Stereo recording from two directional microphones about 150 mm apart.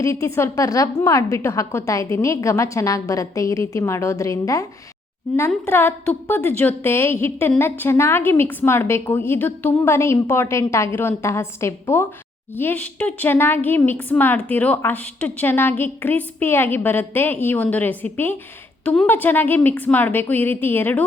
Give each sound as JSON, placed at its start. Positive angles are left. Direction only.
{"t": 0.0, "sound": "a woman's voice", "side_deg": 20}
{"t": 5.6, "sound": "a woman's voice", "side_deg": 15}